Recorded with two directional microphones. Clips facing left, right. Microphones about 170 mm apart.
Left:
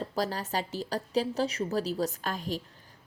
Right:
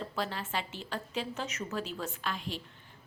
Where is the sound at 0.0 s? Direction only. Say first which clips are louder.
Left 4 dB; 40° left (ahead or behind).